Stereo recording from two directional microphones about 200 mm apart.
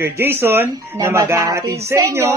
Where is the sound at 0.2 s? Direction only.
10° right (ahead or behind).